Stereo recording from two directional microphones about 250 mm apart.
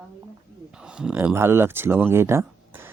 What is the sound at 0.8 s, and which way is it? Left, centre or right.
Speech, centre.